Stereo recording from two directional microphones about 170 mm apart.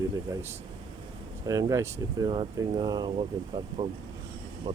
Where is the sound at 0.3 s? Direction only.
20° right (ahead or behind).